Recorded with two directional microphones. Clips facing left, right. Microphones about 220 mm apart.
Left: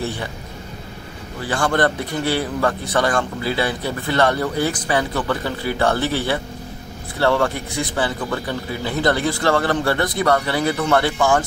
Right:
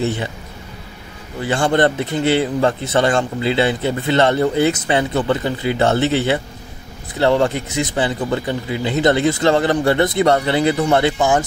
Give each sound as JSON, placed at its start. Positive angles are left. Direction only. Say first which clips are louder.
{"t": 0.0, "sound": "a man's voice", "louder": "right 5 dB", "side_deg": -20}
{"t": 1.4, "sound": "a man's voice", "louder": "right 3 dB", "side_deg": -20}